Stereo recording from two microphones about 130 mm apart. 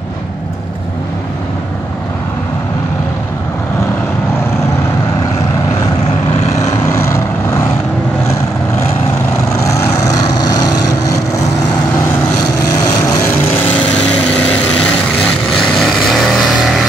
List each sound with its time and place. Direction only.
10.5 s vehicle: 30° left (ahead or behind)
15.8 s vehicle: centre (ahead or behind)